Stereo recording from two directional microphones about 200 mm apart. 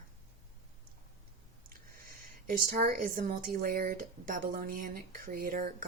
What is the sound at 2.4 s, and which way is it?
Speech, 45° right (ahead or behind).